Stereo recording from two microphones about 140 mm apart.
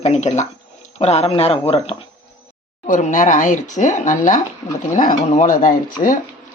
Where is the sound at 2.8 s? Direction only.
65° left (ahead or behind).